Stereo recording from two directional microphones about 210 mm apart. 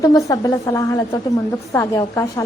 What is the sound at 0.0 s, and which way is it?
A woman's voice, 15° left (ahead or behind).